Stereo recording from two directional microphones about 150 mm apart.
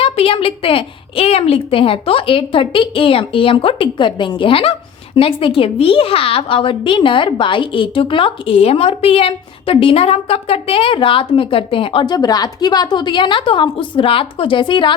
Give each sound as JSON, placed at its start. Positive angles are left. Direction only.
{"t": 0.0, "sound": "a woman's voice", "side_deg": 40}